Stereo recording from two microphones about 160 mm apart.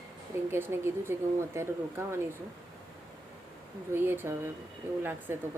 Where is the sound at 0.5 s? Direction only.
15° right (ahead or behind).